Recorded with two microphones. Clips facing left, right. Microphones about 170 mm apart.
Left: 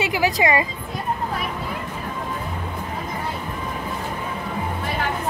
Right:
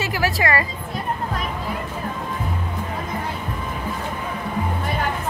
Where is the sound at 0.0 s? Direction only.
15° left (ahead or behind).